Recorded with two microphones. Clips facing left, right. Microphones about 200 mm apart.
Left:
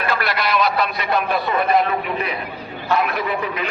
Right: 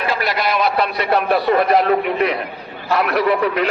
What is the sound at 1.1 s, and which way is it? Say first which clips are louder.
A man's voice: right 6 dB; 65° right (ahead or behind).